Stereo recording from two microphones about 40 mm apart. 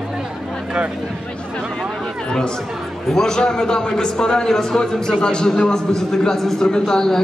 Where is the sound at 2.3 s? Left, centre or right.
Left.